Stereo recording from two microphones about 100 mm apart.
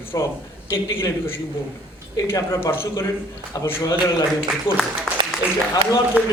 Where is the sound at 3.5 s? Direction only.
40° left (ahead or behind).